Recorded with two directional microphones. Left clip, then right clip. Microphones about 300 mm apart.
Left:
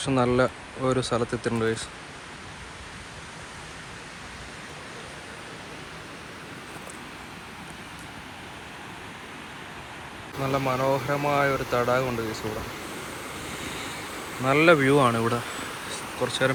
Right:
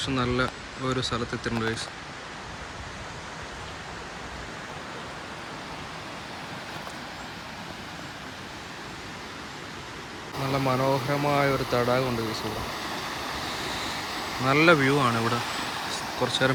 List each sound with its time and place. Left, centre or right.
0.0 s speech: centre
10.3 s speech: centre
14.4 s speech: centre
15.9 s vehicle: centre